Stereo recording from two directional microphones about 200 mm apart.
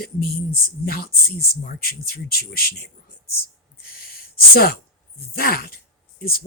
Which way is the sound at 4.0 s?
50° left (ahead or behind).